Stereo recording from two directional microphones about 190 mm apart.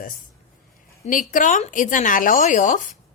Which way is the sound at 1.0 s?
40° left (ahead or behind).